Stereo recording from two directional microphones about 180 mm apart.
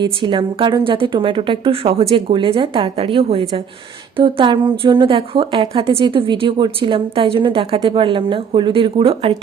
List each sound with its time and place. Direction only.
0.0 s a woman's voice: 25° right (ahead or behind)